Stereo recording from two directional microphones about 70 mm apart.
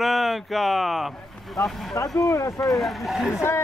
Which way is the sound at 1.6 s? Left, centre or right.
Left.